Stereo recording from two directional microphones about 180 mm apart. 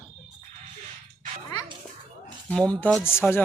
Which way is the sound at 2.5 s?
5° left (ahead or behind).